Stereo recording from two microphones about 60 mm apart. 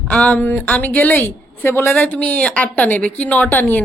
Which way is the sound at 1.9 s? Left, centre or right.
Left.